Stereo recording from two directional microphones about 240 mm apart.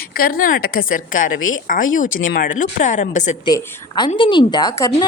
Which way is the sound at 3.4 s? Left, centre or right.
Centre.